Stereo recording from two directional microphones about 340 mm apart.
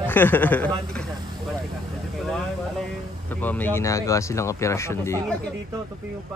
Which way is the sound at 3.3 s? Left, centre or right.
Centre.